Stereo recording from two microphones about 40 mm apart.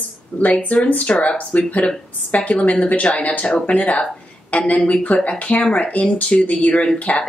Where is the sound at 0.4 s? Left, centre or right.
Left.